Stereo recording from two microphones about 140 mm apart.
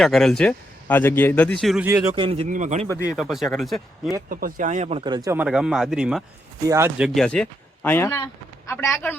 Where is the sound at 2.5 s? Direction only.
60° right (ahead or behind).